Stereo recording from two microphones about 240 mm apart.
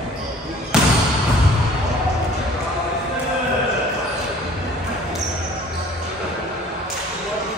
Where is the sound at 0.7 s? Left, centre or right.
Centre.